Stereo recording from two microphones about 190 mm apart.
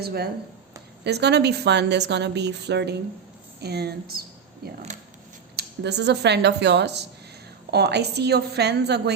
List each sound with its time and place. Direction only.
0.0 s speech: 55° right (ahead or behind)
4.9 s a sound: 40° right (ahead or behind)
5.5 s speech: 60° right (ahead or behind)